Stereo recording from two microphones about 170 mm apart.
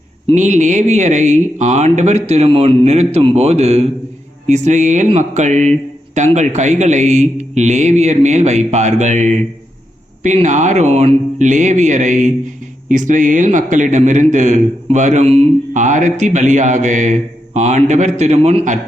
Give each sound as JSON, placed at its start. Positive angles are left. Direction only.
{"t": 0.3, "sound": "a man's voice", "side_deg": -45}